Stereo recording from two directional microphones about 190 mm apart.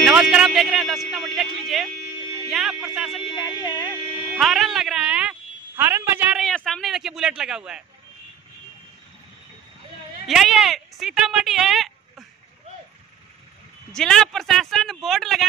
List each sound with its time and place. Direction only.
0.0 s a sound: 5° right (ahead or behind)
2.5 s speech: centre (ahead or behind)
3.3 s speech: 20° left (ahead or behind)
4.4 s a woman's voice: centre (ahead or behind)
6.4 s speech: centre (ahead or behind)
10.2 s speech: centre (ahead or behind)
13.9 s speech: 5° left (ahead or behind)